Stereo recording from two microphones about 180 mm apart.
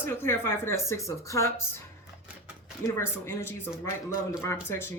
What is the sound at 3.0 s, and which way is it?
Speech, 15° left (ahead or behind).